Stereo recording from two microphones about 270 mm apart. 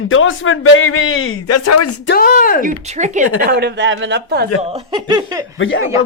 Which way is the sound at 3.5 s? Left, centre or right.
Right.